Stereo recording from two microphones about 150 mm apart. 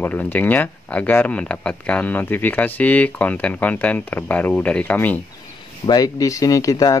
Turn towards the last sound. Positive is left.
turn(degrees=25)  # may be behind; listen again after turning